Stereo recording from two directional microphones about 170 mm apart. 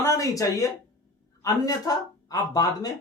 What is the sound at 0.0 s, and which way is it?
A man's voice, 20° left (ahead or behind).